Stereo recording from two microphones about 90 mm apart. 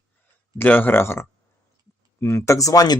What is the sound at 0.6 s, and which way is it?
Speech, 20° left (ahead or behind).